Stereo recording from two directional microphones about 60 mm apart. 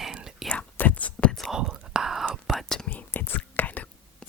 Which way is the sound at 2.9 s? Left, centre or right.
Left.